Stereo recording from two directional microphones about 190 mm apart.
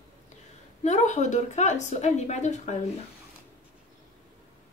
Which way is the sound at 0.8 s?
40° left (ahead or behind).